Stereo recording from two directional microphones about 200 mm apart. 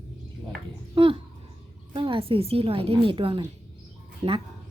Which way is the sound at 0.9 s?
25° right (ahead or behind).